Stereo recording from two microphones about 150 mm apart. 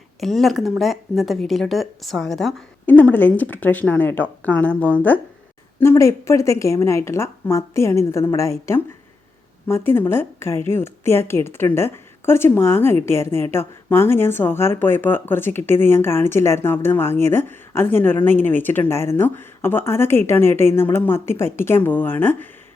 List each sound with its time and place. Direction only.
0.2 s a woman's voice: centre (ahead or behind)